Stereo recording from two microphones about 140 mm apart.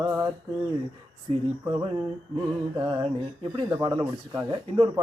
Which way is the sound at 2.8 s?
35° right (ahead or behind).